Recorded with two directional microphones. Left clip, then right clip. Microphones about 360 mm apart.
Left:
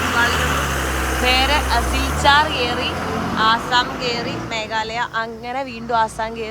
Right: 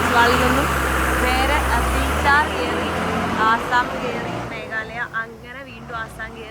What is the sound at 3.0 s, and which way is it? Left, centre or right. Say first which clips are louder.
Vehicle: right 1 dB; right.